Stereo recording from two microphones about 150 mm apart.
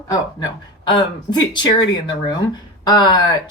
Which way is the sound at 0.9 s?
30° left (ahead or behind).